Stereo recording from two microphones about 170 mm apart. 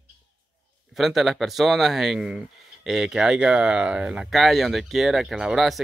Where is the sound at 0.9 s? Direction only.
Centre (ahead or behind).